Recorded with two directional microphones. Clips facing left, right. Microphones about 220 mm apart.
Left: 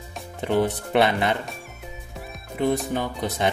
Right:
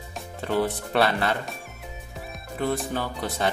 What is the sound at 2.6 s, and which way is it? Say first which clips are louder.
Speech: left 4 dB; 15° left (ahead or behind).